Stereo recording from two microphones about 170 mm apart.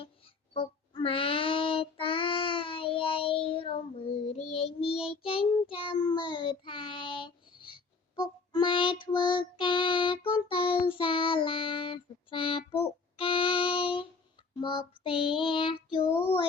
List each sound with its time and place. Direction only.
0.5 s child singing: 30° left (ahead or behind)
13.1 s music: 30° left (ahead or behind)
14.5 s child singing: 30° left (ahead or behind)